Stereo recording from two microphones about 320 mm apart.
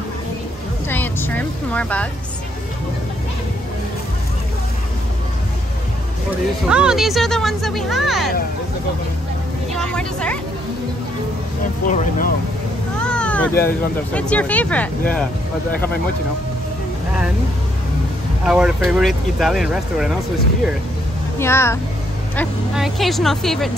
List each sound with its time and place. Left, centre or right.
0.8 s speech: centre
6.7 s speech: centre
9.8 s speech: centre
11.9 s speech: left
13.0 s a sound: centre
14.1 s speech: centre
18.4 s speech: centre
21.4 s speech: centre